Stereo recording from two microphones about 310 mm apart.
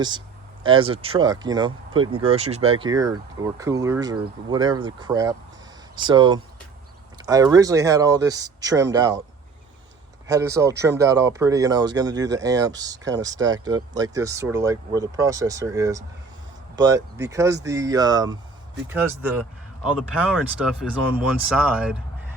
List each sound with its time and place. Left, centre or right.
0.6 s speech: centre
10.2 s speech: centre